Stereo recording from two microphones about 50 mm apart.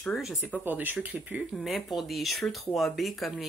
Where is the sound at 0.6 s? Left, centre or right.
Right.